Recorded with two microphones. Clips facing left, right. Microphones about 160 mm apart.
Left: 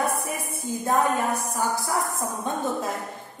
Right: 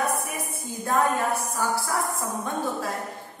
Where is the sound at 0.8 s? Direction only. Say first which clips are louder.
Even; 20° left (ahead or behind).